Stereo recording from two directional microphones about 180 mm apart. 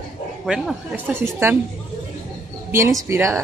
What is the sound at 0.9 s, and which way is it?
Speech, 10° right (ahead or behind).